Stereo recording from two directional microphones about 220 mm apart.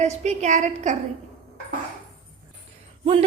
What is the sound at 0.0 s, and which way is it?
Speech, 30° right (ahead or behind).